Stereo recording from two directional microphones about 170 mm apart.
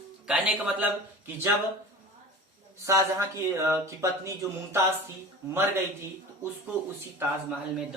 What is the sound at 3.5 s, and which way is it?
Speech, 15° right (ahead or behind).